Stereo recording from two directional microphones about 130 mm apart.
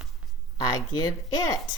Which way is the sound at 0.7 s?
30° left (ahead or behind).